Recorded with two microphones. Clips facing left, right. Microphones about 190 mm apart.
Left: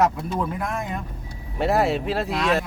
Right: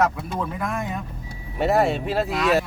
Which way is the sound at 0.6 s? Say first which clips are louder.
Right 1 dB; centre (ahead or behind).